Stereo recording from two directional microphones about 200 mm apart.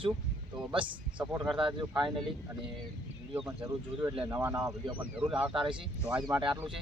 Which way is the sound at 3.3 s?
10° right (ahead or behind).